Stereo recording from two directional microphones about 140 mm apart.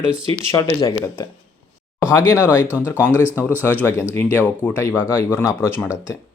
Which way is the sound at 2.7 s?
10° right (ahead or behind).